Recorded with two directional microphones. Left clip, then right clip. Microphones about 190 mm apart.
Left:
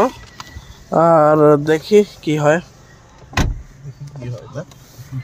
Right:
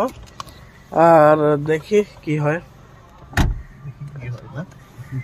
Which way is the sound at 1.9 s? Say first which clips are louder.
Left 7 dB; 35° left (ahead or behind).